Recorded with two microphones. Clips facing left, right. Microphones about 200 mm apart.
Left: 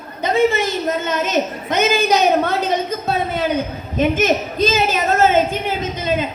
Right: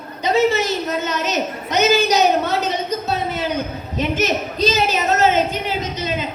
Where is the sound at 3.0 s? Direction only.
55° left (ahead or behind).